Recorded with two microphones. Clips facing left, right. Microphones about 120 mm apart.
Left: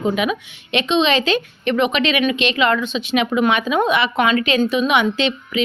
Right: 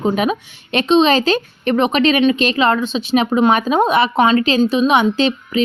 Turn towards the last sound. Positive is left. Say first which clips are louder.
# right 4 dB
turn(degrees=-35)  # may be behind; listen again after turning